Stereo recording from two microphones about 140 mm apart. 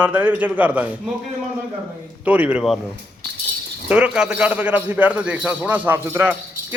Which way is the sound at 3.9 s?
10° right (ahead or behind).